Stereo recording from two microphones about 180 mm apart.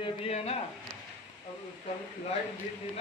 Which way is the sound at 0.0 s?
30° left (ahead or behind).